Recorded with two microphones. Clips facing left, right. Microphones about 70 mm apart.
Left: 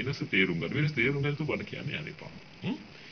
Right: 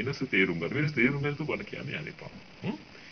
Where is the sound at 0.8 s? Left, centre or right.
Centre.